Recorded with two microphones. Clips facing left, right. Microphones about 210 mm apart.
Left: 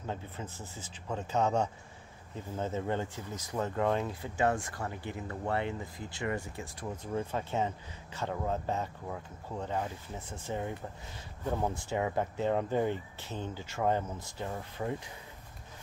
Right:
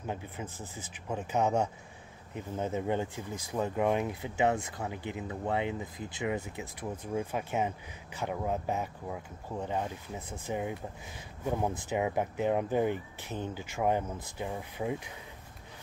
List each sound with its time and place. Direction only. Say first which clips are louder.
0.0 s speech: right 1 dB; 15° right (ahead or behind)